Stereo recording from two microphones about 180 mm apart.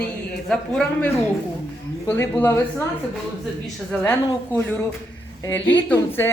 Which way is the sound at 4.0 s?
10° left (ahead or behind).